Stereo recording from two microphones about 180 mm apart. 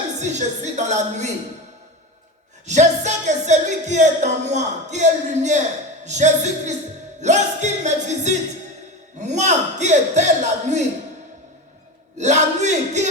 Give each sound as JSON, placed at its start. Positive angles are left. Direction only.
{"t": 0.2, "sound": "music", "side_deg": -40}
{"t": 2.6, "sound": "music", "side_deg": -40}
{"t": 12.1, "sound": "music", "side_deg": -40}